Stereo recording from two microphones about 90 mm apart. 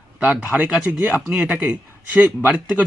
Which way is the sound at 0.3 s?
15° right (ahead or behind).